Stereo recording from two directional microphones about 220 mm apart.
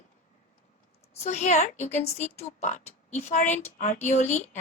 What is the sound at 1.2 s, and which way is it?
Speech, 30° left (ahead or behind).